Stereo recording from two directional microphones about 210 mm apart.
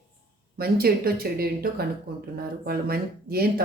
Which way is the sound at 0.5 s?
45° right (ahead or behind).